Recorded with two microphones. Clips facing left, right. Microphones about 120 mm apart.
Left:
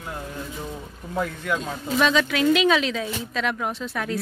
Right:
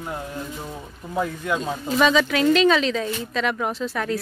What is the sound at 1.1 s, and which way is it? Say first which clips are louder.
Speech: right 2 dB; 10° right (ahead or behind).